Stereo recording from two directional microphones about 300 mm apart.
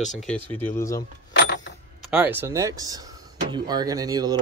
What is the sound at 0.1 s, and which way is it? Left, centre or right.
Speech, centre.